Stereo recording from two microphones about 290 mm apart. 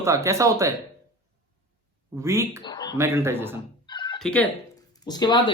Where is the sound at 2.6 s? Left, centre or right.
Centre.